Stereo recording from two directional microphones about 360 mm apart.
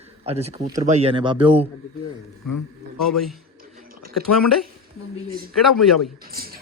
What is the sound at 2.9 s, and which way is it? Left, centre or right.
Speech, centre.